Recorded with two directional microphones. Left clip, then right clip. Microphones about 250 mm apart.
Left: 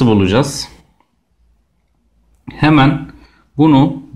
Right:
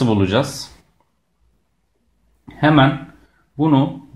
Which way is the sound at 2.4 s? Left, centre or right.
Left.